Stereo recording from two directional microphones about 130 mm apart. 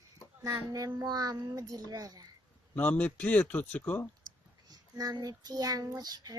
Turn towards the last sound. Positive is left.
turn(degrees=-30)  # may be behind; listen again after turning